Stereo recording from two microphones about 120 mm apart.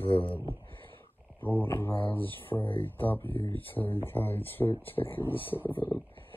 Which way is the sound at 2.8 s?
15° left (ahead or behind).